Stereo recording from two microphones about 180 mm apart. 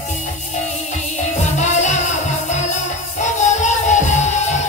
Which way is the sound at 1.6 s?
40° left (ahead or behind).